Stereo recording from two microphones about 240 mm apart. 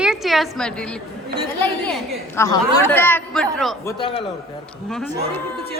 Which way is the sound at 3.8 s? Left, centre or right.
Left.